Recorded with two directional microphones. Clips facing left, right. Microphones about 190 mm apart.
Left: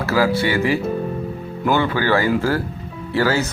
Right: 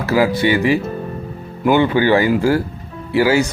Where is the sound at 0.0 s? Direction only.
20° right (ahead or behind).